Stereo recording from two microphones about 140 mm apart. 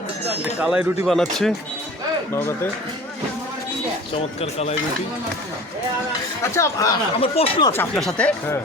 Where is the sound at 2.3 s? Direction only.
20° left (ahead or behind).